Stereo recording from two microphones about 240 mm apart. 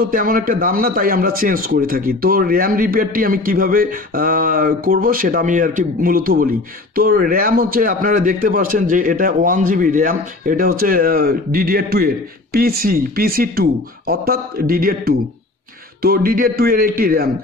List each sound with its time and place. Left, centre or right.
0.1 s a man's voice: right